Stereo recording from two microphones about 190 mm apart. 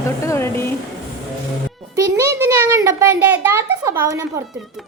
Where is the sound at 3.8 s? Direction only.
15° right (ahead or behind).